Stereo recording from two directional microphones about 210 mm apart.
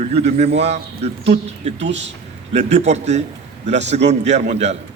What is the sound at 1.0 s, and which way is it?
Speech, 30° right (ahead or behind).